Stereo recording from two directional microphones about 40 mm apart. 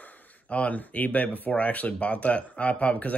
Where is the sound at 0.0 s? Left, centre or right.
Left.